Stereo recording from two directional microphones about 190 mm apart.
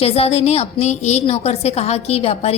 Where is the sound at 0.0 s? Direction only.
30° left (ahead or behind).